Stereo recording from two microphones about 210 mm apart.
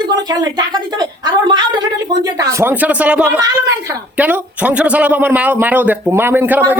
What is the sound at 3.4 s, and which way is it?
A woman's voice, 15° right (ahead or behind).